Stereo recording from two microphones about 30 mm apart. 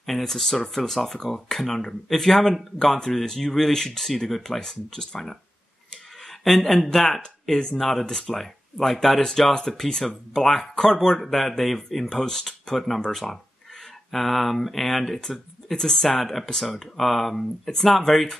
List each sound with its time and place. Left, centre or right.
0.0 s speech: centre
4.4 s speech: centre
6.2 s a sound: centre
6.9 s speech: centre